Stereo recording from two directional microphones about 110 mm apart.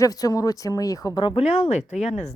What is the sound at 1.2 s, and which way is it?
Speech, 60° left (ahead or behind).